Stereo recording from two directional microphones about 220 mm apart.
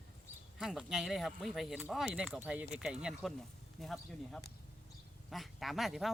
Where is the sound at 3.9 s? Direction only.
10° left (ahead or behind).